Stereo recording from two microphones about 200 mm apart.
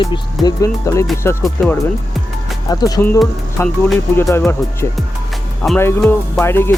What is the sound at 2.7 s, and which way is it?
Music, 20° left (ahead or behind).